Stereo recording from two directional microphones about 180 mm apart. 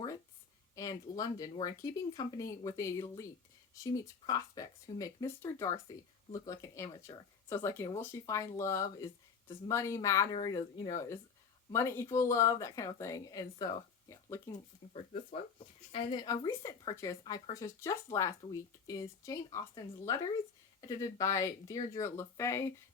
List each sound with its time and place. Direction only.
0.8 s speech: 20° left (ahead or behind)
15.5 s speech: 30° left (ahead or behind)